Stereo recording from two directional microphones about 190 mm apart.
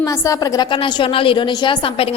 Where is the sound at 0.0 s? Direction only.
20° left (ahead or behind).